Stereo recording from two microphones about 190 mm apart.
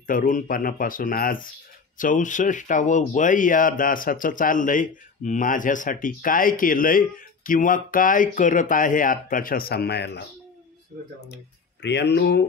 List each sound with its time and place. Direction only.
0.0 s speech: 45° left (ahead or behind); by 10.2 s 60° left (ahead or behind)
11.8 s speech: 65° left (ahead or behind)